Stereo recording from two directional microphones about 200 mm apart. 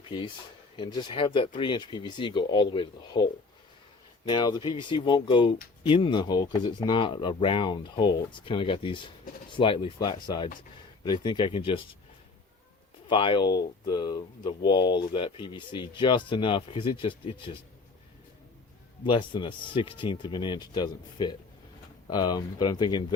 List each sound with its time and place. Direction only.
0.8 s speech: 20° left (ahead or behind)
4.3 s speech: 20° left (ahead or behind)
13.1 s speech: 25° left (ahead or behind)
19.0 s speech: 25° left (ahead or behind)